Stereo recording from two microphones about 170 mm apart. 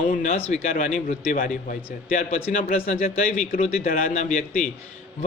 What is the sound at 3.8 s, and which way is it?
Speech, 60° left (ahead or behind).